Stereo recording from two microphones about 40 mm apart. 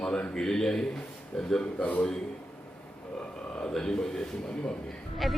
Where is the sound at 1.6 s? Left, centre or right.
Left.